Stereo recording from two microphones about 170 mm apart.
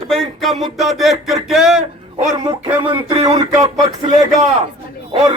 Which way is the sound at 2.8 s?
30° right (ahead or behind).